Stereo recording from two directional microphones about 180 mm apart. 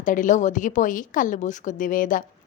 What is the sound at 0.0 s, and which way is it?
A woman's voice, 45° left (ahead or behind).